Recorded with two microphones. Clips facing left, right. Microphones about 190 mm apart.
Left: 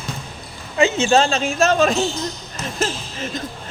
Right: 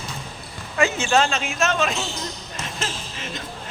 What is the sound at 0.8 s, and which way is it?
Speech, 25° left (ahead or behind).